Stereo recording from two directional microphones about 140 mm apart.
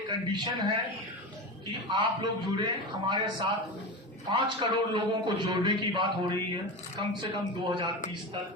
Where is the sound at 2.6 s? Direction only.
35° right (ahead or behind).